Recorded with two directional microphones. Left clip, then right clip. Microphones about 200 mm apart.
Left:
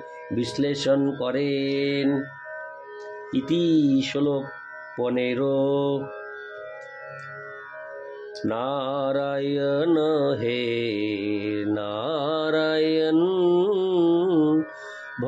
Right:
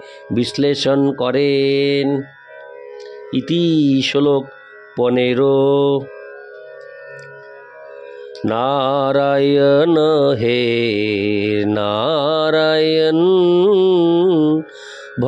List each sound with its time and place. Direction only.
0.3 s mantra: 55° right (ahead or behind)
3.3 s mantra: 60° right (ahead or behind)
8.5 s mantra: 55° right (ahead or behind)